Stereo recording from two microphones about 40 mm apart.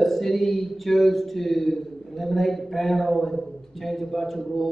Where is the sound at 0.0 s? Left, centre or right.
Centre.